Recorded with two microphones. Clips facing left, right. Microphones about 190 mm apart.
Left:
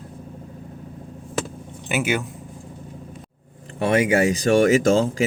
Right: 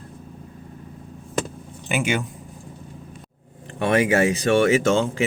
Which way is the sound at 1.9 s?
5° left (ahead or behind).